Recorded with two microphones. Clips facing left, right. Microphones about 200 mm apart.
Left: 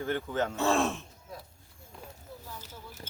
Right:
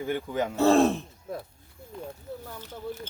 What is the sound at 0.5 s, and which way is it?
Speech, 35° right (ahead or behind).